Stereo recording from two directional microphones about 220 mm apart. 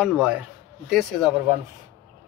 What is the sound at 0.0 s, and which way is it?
A man's voice, centre (ahead or behind).